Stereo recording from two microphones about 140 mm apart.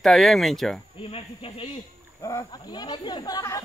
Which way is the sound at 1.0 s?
40° left (ahead or behind).